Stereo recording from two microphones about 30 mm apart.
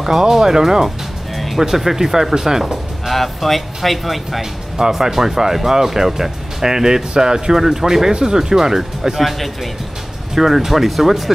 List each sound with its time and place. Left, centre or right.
0.0 s speech: centre
1.3 s music: centre
1.6 s speech: centre
3.1 s speech: centre
4.4 s speech: centre
10.3 s speech: centre